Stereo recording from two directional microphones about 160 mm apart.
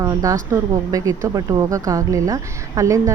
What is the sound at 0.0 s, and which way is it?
A woman's voice, 20° right (ahead or behind).